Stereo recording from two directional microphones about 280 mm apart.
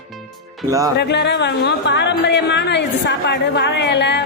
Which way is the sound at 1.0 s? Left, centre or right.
Left.